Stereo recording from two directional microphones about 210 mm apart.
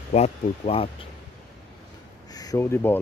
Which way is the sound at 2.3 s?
15° left (ahead or behind).